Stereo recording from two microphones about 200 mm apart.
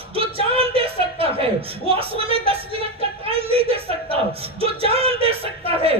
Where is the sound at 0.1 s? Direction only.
30° right (ahead or behind).